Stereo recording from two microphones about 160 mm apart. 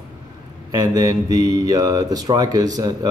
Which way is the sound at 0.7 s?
25° right (ahead or behind).